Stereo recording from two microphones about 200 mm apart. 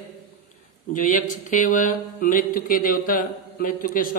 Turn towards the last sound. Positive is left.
turn(degrees=45)  # may be behind; listen again after turning